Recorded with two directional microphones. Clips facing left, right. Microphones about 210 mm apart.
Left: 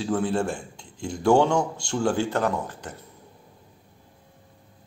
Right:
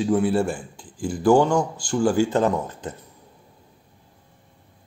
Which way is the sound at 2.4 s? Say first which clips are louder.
Right 4 dB; 20° right (ahead or behind).